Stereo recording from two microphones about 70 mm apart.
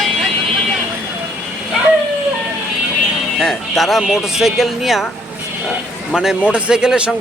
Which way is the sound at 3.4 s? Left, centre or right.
Centre.